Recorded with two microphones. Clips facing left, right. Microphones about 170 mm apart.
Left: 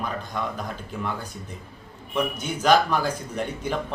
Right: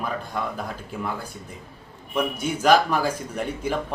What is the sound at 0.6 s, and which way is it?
A man's voice, 5° right (ahead or behind).